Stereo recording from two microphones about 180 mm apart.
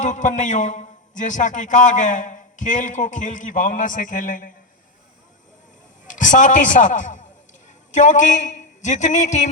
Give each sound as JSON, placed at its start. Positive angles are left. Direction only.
{"t": 0.0, "sound": "a man's voice", "side_deg": 45}
{"t": 6.1, "sound": "a man's voice", "side_deg": 45}